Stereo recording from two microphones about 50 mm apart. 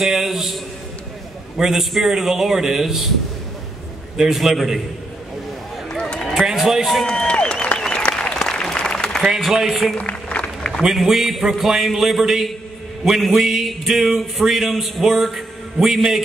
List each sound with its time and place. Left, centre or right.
0.0 s a man's voice: centre
1.6 s speech: centre
4.2 s speech: centre
5.9 s run: centre
6.2 s a sound: centre
7.1 s a sound: centre
8.1 s applause: centre
9.2 s a man's voice: centre
9.9 s applause: left
10.8 s a man's voice: centre